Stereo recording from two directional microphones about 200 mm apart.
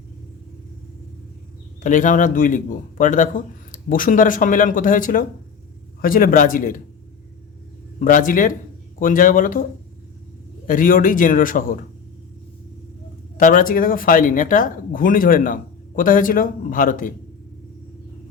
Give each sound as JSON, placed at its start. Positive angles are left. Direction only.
{"t": 1.8, "sound": "speech", "side_deg": 40}
{"t": 7.9, "sound": "speech", "side_deg": 40}
{"t": 10.7, "sound": "speech", "side_deg": 45}
{"t": 13.3, "sound": "speech", "side_deg": 45}